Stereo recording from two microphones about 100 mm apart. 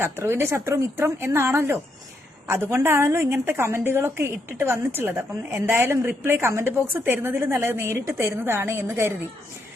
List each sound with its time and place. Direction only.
0.0 s a woman's voice: 25° right (ahead or behind)